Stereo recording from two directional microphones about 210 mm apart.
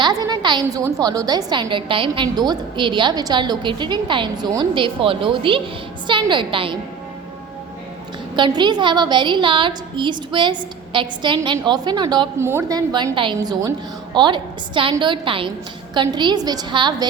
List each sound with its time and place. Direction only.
0.0 s a woman's voice: 20° right (ahead or behind)
8.4 s a woman's voice: 20° right (ahead or behind)